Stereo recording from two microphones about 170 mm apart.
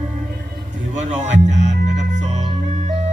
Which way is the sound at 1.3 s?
45° right (ahead or behind).